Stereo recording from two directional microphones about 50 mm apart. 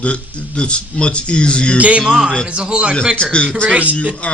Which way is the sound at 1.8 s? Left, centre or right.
Right.